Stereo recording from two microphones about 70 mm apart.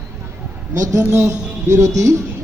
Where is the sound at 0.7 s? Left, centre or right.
Right.